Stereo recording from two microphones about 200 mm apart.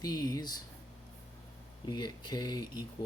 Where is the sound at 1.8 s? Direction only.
20° left (ahead or behind).